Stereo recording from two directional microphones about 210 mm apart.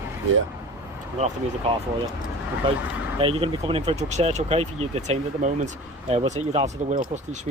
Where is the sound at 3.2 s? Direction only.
25° right (ahead or behind).